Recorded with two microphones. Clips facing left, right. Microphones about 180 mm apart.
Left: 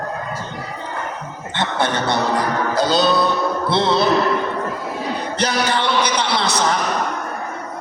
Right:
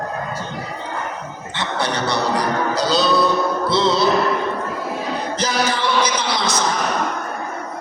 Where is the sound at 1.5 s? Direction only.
50° left (ahead or behind).